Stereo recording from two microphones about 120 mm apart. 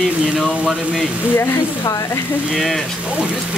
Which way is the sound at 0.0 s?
5° right (ahead or behind).